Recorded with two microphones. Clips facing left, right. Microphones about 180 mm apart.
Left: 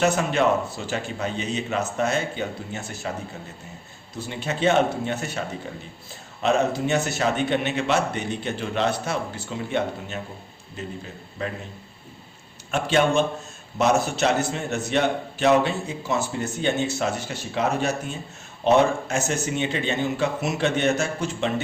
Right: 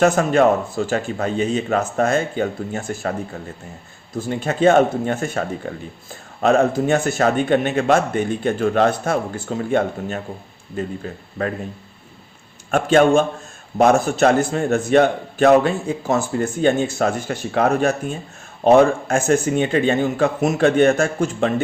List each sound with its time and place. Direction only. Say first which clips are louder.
0.0 s a man's voice: right 6 dB; 45° right (ahead or behind)
12.7 s a man's voice: right 6 dB; 50° right (ahead or behind)